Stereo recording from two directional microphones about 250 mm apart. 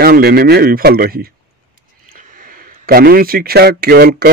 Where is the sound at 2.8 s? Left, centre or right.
Right.